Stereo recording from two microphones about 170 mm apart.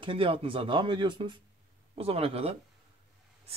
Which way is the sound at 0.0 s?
30° right (ahead or behind).